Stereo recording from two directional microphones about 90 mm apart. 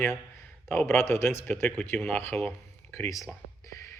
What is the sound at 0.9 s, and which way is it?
A man's voice, 30° left (ahead or behind).